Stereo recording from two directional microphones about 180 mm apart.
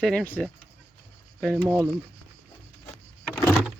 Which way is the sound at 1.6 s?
20° right (ahead or behind).